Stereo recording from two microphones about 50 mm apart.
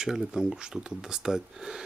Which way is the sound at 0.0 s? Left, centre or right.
Centre.